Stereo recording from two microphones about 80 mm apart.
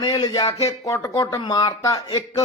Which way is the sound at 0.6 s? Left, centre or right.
Left.